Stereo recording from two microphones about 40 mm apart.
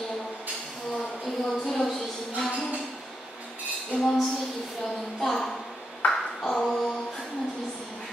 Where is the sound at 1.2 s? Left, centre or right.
Centre.